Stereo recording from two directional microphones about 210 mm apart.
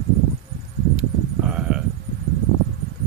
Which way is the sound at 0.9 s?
5° right (ahead or behind).